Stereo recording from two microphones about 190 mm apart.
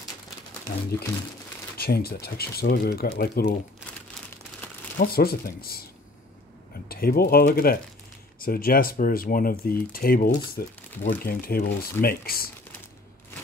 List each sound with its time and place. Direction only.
1.8 s speech: 55° left (ahead or behind)
4.6 s crumpling: 10° left (ahead or behind)
4.9 s speech: 55° left (ahead or behind)
6.9 s speech: 55° left (ahead or behind)